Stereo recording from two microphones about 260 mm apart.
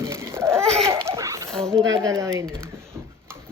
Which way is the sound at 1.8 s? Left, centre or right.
Right.